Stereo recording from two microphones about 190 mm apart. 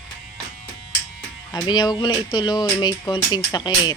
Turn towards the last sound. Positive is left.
turn(degrees=20)  # may be behind; listen again after turning